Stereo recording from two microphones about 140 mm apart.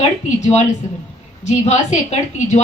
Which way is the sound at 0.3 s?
55° left (ahead or behind).